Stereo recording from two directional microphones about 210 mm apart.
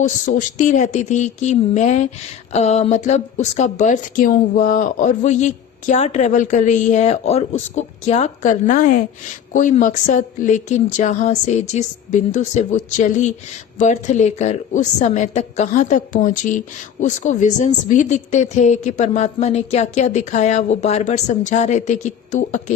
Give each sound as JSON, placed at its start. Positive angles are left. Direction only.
{"t": 0.3, "sound": "a woman's voice", "side_deg": 35}